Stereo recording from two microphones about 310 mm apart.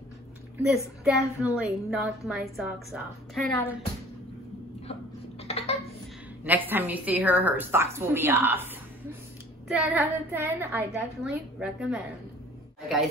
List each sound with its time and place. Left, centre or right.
0.6 s a woman's voice: centre
5.4 s a sound: centre
6.4 s a woman's voice: centre
9.8 s a woman's voice: centre